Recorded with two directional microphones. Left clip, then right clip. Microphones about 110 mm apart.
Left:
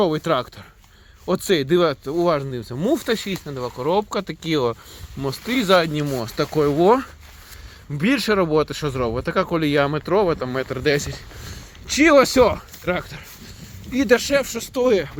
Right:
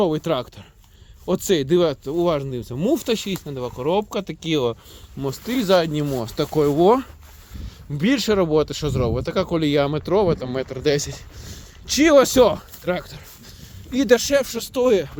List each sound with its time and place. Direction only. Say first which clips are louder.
0.0 s speech: left 1 dB; 20° right (ahead or behind)
5.2 s speech: left 1 dB; centre (ahead or behind)
5.5 s speech: left 1 dB; 20° right (ahead or behind); by 15.1 s 45° right (ahead or behind)